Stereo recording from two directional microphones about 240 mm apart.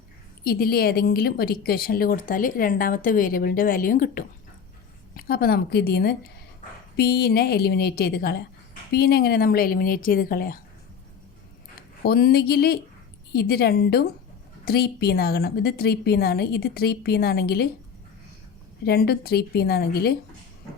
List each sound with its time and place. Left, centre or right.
0.4 s speech: left
12.0 s speech: left
18.9 s speech: left